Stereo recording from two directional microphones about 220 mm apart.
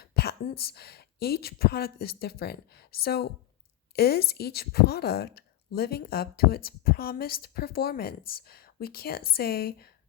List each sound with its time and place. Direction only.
0.0 s a woman's voice: 45° left (ahead or behind)